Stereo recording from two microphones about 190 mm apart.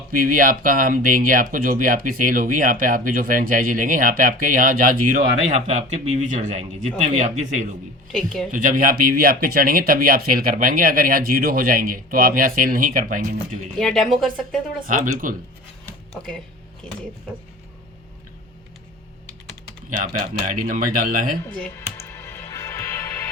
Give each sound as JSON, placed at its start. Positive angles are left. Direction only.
{"t": 0.1, "sound": "speech", "side_deg": -45}
{"t": 8.1, "sound": "speech", "side_deg": 0}
{"t": 8.5, "sound": "speech", "side_deg": -45}
{"t": 13.7, "sound": "speech", "side_deg": 0}
{"t": 14.8, "sound": "speech", "side_deg": -45}
{"t": 20.0, "sound": "speech", "side_deg": -45}
{"t": 22.0, "sound": "music", "side_deg": 15}